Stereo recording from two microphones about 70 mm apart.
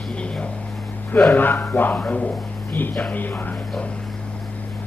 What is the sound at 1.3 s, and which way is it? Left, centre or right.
Speech, left.